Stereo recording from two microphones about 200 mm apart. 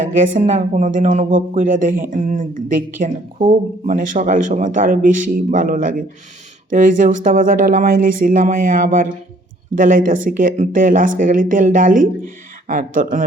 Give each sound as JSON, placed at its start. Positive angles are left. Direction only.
{"t": 0.0, "sound": "speech", "side_deg": -40}